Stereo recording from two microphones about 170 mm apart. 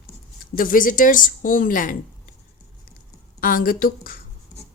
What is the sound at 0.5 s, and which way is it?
A woman's voice, 55° left (ahead or behind).